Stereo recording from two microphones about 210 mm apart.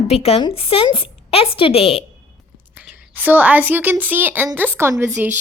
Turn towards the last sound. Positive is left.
turn(degrees=-10)  # may be behind; listen again after turning